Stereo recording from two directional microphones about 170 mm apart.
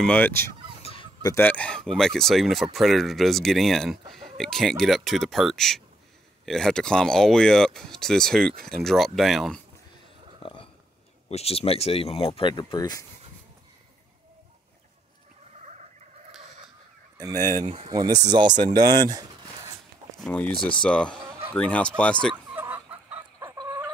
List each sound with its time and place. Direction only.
0.0 s speech: 10° left (ahead or behind)
0.8 s fowl: 35° left (ahead or behind)
1.2 s speech: 15° left (ahead or behind)
10.4 s burping: 30° left (ahead or behind)
11.2 s speech: 35° left (ahead or behind)
17.2 s speech: 20° right (ahead or behind)
17.6 s speech: 30° right (ahead or behind)
20.2 s speech: 10° left (ahead or behind)
22.5 s fowl: 10° right (ahead or behind)